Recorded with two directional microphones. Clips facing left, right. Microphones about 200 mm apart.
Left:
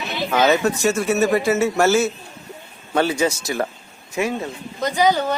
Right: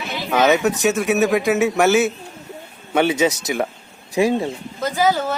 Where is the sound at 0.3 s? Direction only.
Centre (ahead or behind).